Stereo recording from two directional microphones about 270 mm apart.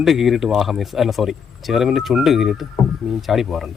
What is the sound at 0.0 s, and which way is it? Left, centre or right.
Speech, centre.